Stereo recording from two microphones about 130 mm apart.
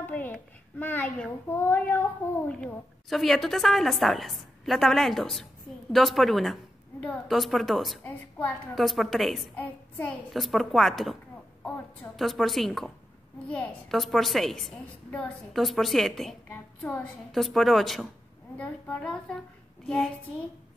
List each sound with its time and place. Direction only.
0.0 s a sound: 10° left (ahead or behind)
1.5 s child singing: 15° left (ahead or behind)
2.6 s a woman's voice: centre (ahead or behind)
8.0 s child singing: 10° left (ahead or behind)
8.7 s a woman's voice: centre (ahead or behind)
9.6 s a child's voice: 15° left (ahead or behind)
10.3 s a woman's voice: centre (ahead or behind)
12.2 s a woman's voice: centre (ahead or behind)
18.6 s child singing: 10° left (ahead or behind)